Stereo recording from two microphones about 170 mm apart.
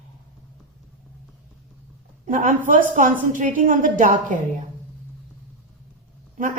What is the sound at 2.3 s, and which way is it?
A woman's voice, 50° right (ahead or behind).